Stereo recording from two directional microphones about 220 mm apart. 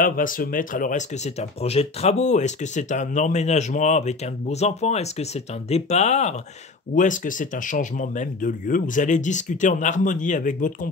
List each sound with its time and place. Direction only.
0.0 s speech: 40° left (ahead or behind)